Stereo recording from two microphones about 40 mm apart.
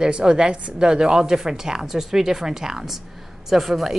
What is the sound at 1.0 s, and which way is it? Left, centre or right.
A woman's voice, centre.